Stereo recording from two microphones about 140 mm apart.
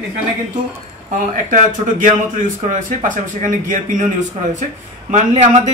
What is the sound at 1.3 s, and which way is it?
Speech, 70° right (ahead or behind).